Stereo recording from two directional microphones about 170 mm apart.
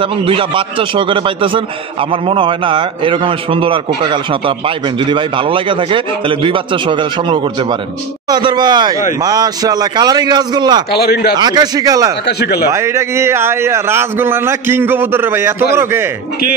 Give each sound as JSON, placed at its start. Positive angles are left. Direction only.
{"t": 0.0, "sound": "a man's voice", "side_deg": -30}
{"t": 10.9, "sound": "speech", "side_deg": 65}
{"t": 11.3, "sound": "a man's voice", "side_deg": -25}
{"t": 12.3, "sound": "speech", "side_deg": 75}
{"t": 12.6, "sound": "speech", "side_deg": -15}